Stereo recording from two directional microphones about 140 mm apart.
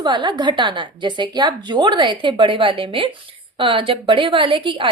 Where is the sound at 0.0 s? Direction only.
30° right (ahead or behind).